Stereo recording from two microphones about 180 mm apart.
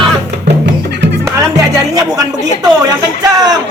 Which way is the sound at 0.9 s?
70° right (ahead or behind).